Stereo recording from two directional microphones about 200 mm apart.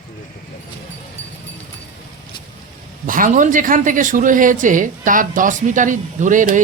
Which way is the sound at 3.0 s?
40° right (ahead or behind).